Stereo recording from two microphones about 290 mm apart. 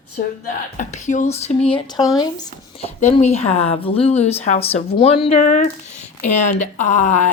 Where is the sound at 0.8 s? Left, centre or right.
Left.